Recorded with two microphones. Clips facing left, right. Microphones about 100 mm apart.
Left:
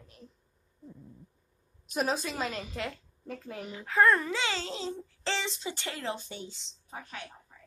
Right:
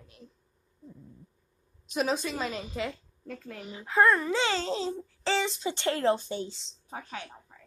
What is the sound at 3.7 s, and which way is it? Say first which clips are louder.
Speech: right 1 dB; 20° right (ahead or behind).